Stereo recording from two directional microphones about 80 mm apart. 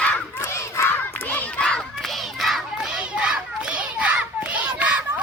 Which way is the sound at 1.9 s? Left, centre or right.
Centre.